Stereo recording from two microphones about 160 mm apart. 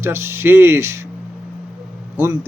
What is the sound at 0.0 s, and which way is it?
A man's voice, 15° right (ahead or behind).